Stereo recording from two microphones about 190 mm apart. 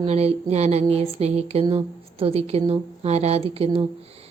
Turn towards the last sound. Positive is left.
turn(degrees=-30)  # may be behind; listen again after turning